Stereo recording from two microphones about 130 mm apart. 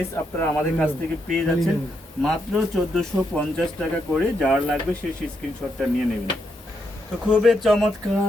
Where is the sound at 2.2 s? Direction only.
Centre (ahead or behind).